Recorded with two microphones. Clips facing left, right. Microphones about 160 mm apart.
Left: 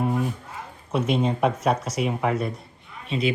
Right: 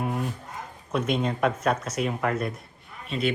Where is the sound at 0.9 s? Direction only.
5° left (ahead or behind).